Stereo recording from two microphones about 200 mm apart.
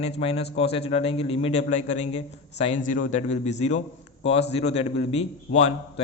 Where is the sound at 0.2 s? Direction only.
30° left (ahead or behind).